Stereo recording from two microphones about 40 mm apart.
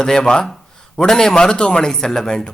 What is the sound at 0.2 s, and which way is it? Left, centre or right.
Speech, left.